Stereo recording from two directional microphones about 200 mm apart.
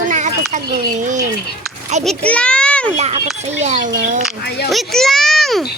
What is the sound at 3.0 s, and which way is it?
A child's voice, 35° right (ahead or behind).